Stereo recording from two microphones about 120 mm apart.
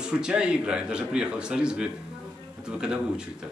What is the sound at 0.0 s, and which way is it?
A man's voice, 10° right (ahead or behind).